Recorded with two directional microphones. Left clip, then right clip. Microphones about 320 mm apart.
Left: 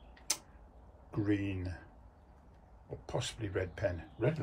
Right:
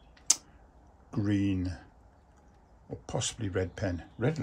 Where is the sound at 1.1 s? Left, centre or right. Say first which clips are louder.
Right 4 dB; right.